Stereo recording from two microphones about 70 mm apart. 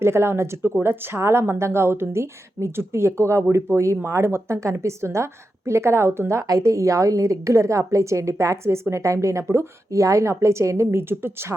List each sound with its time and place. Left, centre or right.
0.0 s a woman's voice: right
6.6 s a woman's voice: right